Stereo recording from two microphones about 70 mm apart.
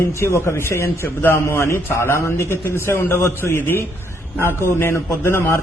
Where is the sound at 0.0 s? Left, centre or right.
Left.